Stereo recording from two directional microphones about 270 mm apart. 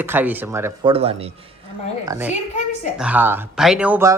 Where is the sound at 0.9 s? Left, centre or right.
Right.